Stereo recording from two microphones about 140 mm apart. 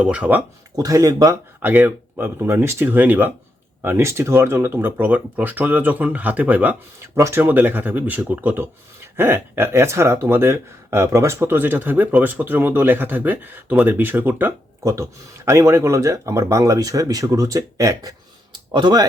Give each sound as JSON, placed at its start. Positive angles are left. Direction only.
{"t": 0.0, "sound": "speech", "side_deg": -10}
{"t": 0.8, "sound": "speech", "side_deg": -25}
{"t": 1.7, "sound": "speech", "side_deg": -15}